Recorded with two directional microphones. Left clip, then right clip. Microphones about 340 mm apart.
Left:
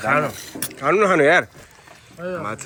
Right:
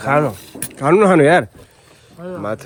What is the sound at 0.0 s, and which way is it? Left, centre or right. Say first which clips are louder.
A man's voice: right 3 dB; centre.